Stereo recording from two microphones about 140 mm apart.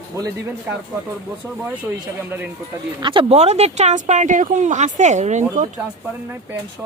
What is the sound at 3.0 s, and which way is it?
Speech, 35° right (ahead or behind).